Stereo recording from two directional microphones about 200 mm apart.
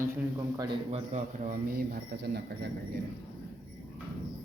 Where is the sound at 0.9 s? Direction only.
40° right (ahead or behind); by 2.7 s 55° right (ahead or behind).